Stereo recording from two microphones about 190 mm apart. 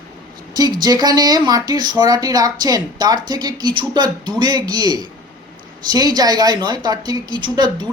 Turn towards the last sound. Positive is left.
turn(degrees=-25)  # may be behind; listen again after turning